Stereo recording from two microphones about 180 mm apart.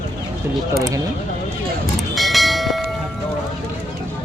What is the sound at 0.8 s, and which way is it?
Speech, 15° right (ahead or behind).